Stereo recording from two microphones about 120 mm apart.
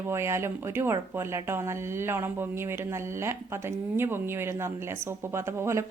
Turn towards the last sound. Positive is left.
turn(degrees=-20)  # may be behind; listen again after turning